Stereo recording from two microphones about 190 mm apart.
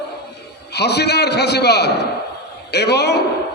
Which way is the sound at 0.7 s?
60° left (ahead or behind).